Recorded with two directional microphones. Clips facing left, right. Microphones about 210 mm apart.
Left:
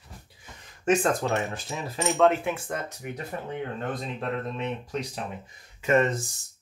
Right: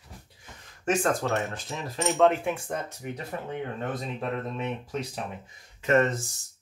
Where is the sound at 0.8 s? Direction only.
20° left (ahead or behind).